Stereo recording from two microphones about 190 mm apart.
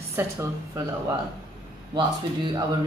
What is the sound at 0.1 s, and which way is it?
Speech, 15° right (ahead or behind).